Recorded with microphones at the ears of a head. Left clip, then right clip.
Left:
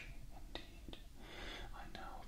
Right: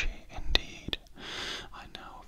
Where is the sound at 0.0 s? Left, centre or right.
Right.